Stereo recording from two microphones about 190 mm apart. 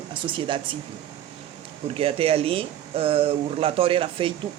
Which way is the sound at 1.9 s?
30° right (ahead or behind).